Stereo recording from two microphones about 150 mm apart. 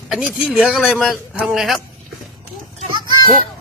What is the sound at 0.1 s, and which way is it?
Speech, 5° right (ahead or behind).